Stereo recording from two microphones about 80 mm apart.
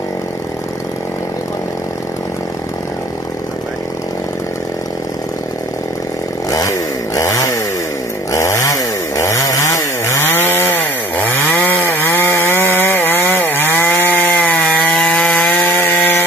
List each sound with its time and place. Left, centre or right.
7.2 s chainsaw: left